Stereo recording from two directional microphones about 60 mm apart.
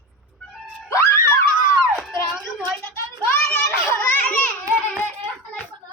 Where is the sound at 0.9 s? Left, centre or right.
Left.